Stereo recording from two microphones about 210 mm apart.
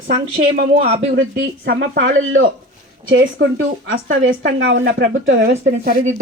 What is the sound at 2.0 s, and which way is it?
Speech, 70° right (ahead or behind).